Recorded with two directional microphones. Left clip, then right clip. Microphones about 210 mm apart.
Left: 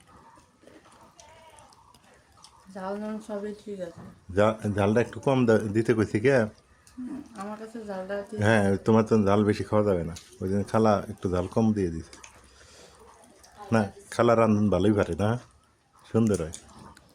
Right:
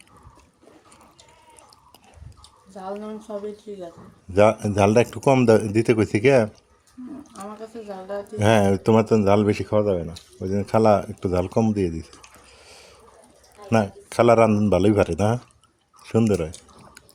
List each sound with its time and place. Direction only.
2.7 s speech: 10° left (ahead or behind)
4.4 s a man's voice: 25° right (ahead or behind)
7.9 s speech: 10° left (ahead or behind)
8.4 s a man's voice: 25° right (ahead or behind)
12.6 s a sound: 20° right (ahead or behind)
13.7 s a man's voice: 20° right (ahead or behind)